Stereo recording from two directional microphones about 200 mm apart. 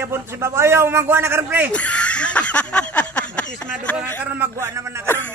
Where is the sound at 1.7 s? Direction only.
5° left (ahead or behind).